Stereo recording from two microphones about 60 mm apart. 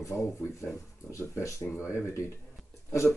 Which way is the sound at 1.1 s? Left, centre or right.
Left.